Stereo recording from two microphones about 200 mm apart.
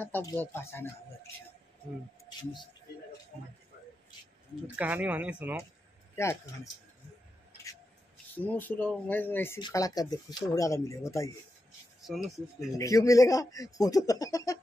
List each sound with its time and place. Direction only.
0.0 s speech: 15° left (ahead or behind)
4.6 s speech: 5° right (ahead or behind)
6.1 s speech: 15° left (ahead or behind)
8.4 s speech: 10° left (ahead or behind)
12.5 s speech: 15° left (ahead or behind)